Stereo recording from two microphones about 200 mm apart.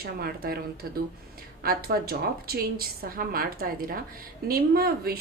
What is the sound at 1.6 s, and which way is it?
A woman's voice, 50° right (ahead or behind).